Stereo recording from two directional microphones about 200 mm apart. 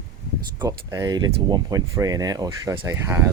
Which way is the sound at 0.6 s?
20° right (ahead or behind).